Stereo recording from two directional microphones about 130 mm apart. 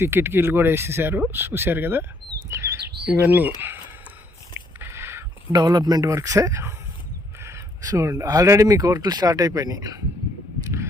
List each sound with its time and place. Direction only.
0.0 s speech: 20° right (ahead or behind)
2.5 s chirp: 20° right (ahead or behind)
4.8 s a sound: 20° right (ahead or behind)
5.5 s speech: 30° right (ahead or behind)